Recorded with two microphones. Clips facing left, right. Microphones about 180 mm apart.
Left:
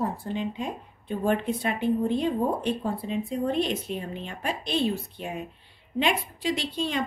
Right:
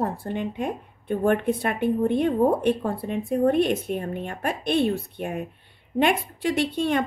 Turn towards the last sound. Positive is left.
turn(degrees=-55)  # may be behind; listen again after turning